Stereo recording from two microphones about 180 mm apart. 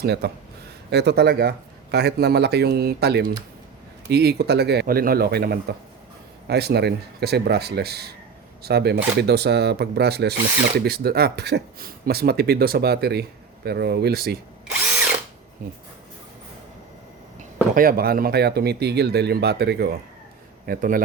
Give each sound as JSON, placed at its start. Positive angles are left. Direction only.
{"t": 0.0, "sound": "speech", "side_deg": -65}
{"t": 17.7, "sound": "speech", "side_deg": -55}
{"t": 20.7, "sound": "speech", "side_deg": -50}